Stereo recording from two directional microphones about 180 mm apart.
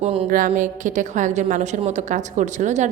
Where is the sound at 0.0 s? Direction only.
35° right (ahead or behind).